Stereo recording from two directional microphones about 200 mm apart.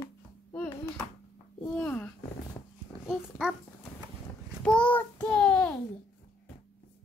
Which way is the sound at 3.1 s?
Centre (ahead or behind).